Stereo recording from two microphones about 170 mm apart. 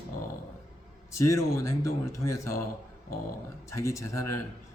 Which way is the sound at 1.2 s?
20° left (ahead or behind).